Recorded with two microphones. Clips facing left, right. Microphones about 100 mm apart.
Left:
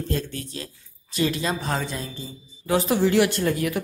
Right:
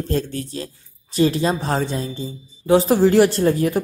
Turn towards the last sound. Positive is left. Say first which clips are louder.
# right 6 dB
turn(degrees=-35)  # may be behind; listen again after turning